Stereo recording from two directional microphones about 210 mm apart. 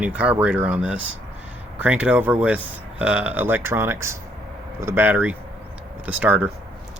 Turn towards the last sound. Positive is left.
turn(degrees=-5)  # may be behind; listen again after turning